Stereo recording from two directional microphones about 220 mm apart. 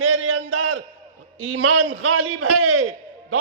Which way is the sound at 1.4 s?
65° right (ahead or behind).